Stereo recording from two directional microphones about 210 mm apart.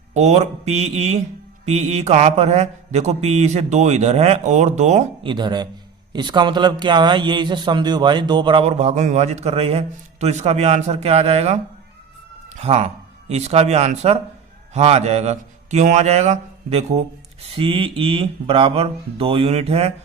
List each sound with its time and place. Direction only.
0.1 s a man's voice: 30° right (ahead or behind)